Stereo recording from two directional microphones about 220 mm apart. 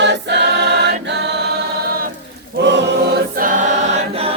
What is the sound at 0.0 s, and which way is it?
Choir, 50° right (ahead or behind).